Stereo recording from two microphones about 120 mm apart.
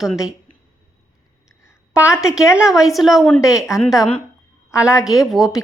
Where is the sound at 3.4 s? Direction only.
25° left (ahead or behind).